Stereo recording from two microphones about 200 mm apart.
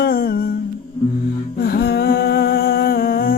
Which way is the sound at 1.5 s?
50° left (ahead or behind).